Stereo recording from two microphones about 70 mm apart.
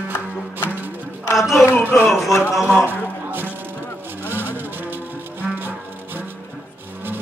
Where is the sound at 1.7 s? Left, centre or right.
Left.